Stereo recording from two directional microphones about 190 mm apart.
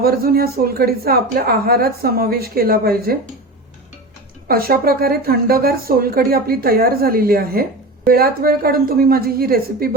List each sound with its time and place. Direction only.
0.0 s a woman's voice: 55° right (ahead or behind)
4.4 s a woman's voice: 50° right (ahead or behind)